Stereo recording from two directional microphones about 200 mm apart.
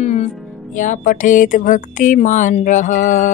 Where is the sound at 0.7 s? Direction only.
40° left (ahead or behind).